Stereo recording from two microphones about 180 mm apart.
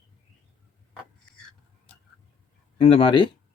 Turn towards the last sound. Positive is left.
turn(degrees=25)  # may be behind; listen again after turning